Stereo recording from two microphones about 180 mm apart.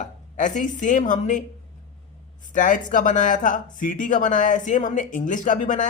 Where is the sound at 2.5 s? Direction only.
45° left (ahead or behind).